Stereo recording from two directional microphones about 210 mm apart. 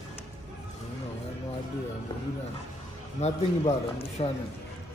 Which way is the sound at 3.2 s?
30° left (ahead or behind).